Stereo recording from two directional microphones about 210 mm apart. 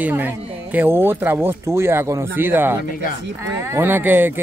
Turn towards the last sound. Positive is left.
turn(degrees=-10)  # may be behind; listen again after turning